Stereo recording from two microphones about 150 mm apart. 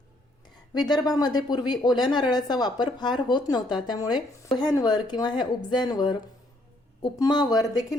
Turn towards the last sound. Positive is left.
turn(degrees=25)  # may be behind; listen again after turning